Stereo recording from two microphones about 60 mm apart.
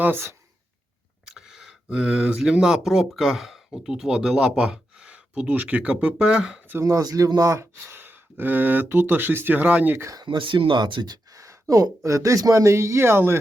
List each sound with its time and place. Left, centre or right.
0.0 s speech: right
1.2 s speech: centre
6.8 s speech: right
7.6 s speech: right
11.3 s speech: right